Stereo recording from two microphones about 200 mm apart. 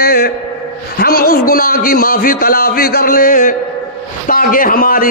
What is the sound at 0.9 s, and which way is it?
A man's voice, 50° left (ahead or behind).